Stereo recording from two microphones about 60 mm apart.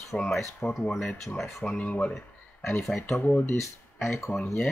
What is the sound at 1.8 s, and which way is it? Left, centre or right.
Speech, left.